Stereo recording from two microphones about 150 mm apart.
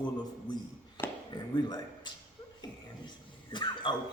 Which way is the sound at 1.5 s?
25° left (ahead or behind).